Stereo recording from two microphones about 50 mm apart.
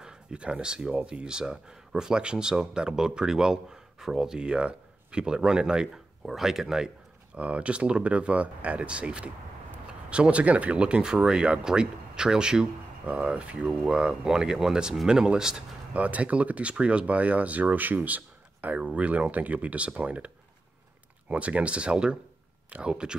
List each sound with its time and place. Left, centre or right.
0.0 s speech: centre
6.2 s speech: centre
7.3 s speech: right
13.0 s speech: right
15.9 s speech: right
21.3 s speech: right